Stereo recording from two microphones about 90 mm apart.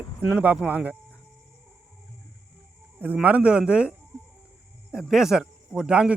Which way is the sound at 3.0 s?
15° right (ahead or behind).